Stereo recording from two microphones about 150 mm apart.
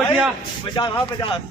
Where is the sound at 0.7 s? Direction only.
30° left (ahead or behind).